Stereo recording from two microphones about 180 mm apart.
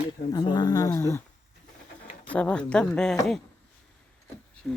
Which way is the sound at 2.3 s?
5° left (ahead or behind).